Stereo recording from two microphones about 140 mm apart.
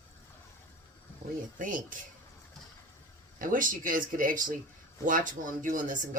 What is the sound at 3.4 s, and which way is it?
Speech, 75° right (ahead or behind).